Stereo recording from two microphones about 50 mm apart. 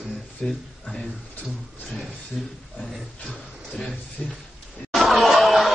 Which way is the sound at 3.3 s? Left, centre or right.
Centre.